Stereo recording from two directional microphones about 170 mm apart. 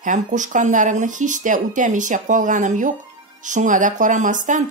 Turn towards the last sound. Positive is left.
turn(degrees=-50)  # may be behind; listen again after turning